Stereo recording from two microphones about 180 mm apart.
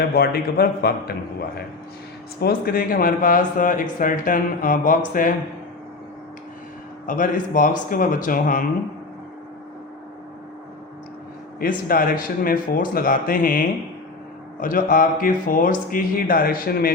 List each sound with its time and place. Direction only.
0.1 s a man's voice: 60° left (ahead or behind)
7.1 s speech: 45° left (ahead or behind)
11.6 s speech: 50° left (ahead or behind)